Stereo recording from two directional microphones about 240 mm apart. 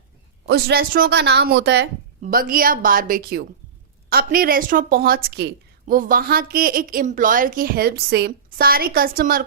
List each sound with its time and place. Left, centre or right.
0.4 s a woman's voice: right